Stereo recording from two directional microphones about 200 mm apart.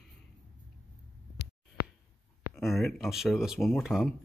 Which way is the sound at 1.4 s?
55° left (ahead or behind).